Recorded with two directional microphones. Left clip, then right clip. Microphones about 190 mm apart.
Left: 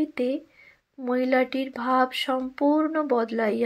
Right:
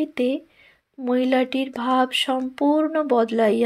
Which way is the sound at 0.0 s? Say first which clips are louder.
Right 3 dB; 40° right (ahead or behind).